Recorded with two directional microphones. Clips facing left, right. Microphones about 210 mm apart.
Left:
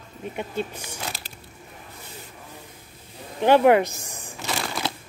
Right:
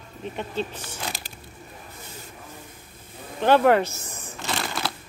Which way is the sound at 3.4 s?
15° left (ahead or behind).